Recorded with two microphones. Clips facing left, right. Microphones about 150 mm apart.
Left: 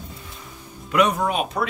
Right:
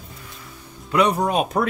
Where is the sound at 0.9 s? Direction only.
30° right (ahead or behind).